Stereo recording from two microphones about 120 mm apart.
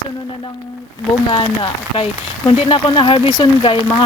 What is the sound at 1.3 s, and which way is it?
Speech, 40° left (ahead or behind).